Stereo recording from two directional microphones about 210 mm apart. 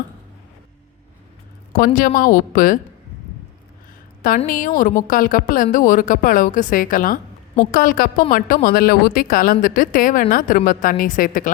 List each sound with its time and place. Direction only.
1.7 s speech: 40° left (ahead or behind)
4.2 s speech: 40° left (ahead or behind)